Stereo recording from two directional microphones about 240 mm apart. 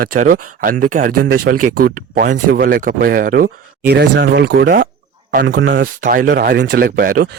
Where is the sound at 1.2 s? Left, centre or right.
Right.